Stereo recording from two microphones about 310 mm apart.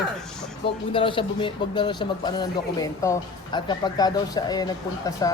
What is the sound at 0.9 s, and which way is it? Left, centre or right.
Speech, centre.